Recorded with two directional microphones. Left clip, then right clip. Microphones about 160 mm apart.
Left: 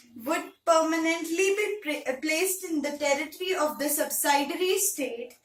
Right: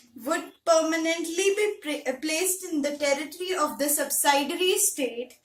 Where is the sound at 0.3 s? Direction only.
25° right (ahead or behind).